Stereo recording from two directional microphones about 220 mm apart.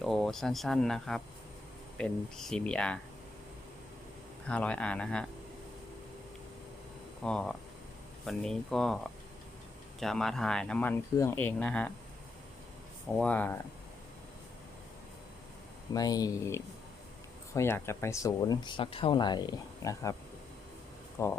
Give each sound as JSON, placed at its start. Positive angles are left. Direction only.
{"t": 0.0, "sound": "speech", "side_deg": 0}
{"t": 4.4, "sound": "speech", "side_deg": 5}
{"t": 7.2, "sound": "speech", "side_deg": 5}
{"t": 10.0, "sound": "speech", "side_deg": 0}
{"t": 13.1, "sound": "speech", "side_deg": 5}
{"t": 15.9, "sound": "speech", "side_deg": 15}
{"t": 21.2, "sound": "speech", "side_deg": 15}